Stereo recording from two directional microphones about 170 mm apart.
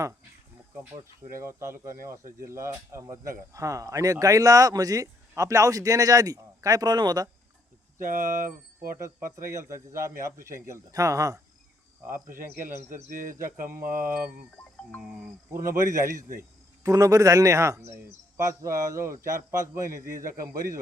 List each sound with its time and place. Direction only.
1.3 s a man's voice: 15° right (ahead or behind)
7.9 s speech: 50° right (ahead or behind)
9.5 s a man's voice: 15° right (ahead or behind)
12.1 s speech: 55° right (ahead or behind)
15.5 s a man's voice: 15° right (ahead or behind)